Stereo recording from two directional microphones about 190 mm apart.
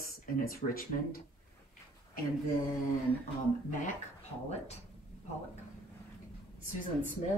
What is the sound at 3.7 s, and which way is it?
Speech, 40° left (ahead or behind).